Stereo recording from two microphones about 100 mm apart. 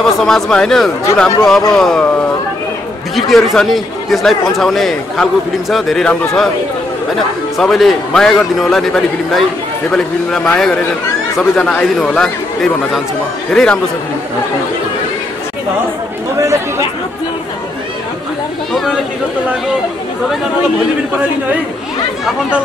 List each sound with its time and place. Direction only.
0.0 s speech: 5° left (ahead or behind)
7.5 s speech: centre (ahead or behind)
13.5 s speech: 5° left (ahead or behind)
18.7 s speech: centre (ahead or behind)